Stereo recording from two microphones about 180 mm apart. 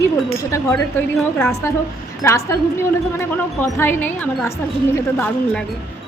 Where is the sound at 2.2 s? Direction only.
15° left (ahead or behind).